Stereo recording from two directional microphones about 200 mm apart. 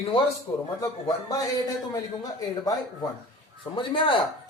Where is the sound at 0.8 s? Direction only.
15° left (ahead or behind).